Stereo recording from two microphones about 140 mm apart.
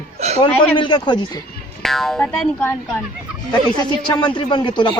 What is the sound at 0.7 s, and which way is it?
Speech, 35° left (ahead or behind).